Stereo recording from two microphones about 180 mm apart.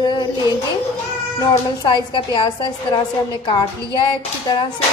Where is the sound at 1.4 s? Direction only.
20° left (ahead or behind).